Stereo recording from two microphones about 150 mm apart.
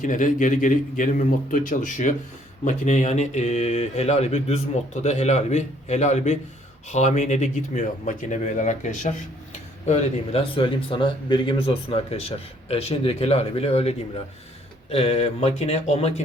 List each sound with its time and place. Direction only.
0.0 s speech: 60° left (ahead or behind)